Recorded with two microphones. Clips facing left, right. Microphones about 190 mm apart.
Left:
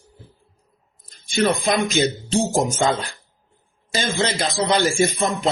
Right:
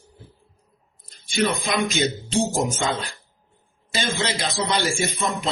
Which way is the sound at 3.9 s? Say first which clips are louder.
Left 3 dB; 50° left (ahead or behind).